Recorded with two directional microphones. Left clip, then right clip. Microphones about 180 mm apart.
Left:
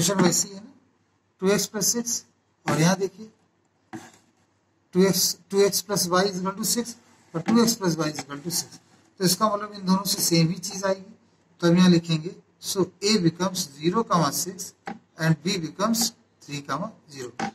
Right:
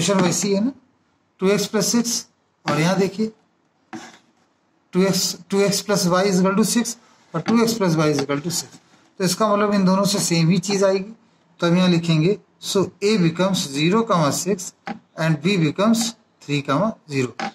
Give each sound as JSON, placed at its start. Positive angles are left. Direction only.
{"t": 0.0, "sound": "a man's voice", "side_deg": -40}
{"t": 3.9, "sound": "a sound", "side_deg": -40}
{"t": 4.9, "sound": "a man's voice", "side_deg": -40}